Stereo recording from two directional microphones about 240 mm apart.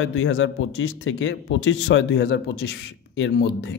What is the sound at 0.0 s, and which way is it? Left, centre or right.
A man's voice, left.